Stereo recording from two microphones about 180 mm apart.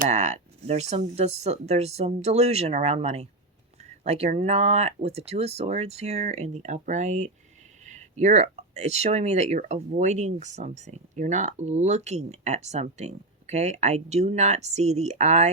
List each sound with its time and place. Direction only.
0.0 s speech: 40° right (ahead or behind)